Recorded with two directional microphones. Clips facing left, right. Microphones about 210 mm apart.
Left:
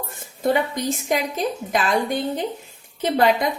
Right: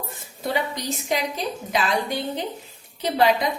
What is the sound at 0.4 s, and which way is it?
A woman's voice, 50° left (ahead or behind).